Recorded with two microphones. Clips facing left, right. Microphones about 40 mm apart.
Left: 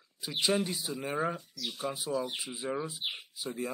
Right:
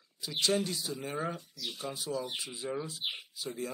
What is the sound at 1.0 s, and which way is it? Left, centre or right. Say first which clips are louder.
Speech: left 5 dB; left.